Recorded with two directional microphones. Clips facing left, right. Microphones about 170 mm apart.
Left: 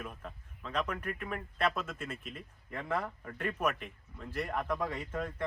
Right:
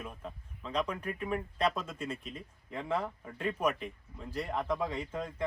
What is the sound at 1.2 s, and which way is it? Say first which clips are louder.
Speech: right 3 dB; 20° right (ahead or behind).